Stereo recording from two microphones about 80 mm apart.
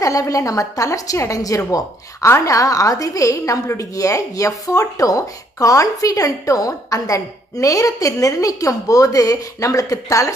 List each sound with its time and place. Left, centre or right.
0.0 s a woman's voice: left